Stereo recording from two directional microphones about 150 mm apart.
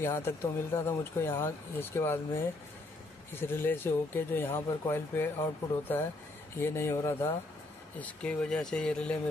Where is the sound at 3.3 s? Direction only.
15° left (ahead or behind).